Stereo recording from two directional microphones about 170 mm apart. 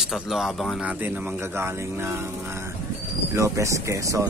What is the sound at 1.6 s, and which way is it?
Speech, 15° right (ahead or behind).